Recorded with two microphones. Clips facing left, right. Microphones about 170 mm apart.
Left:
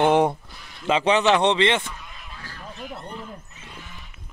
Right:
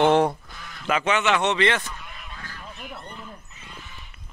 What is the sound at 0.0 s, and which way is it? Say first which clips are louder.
Speech: even; 15° left (ahead or behind).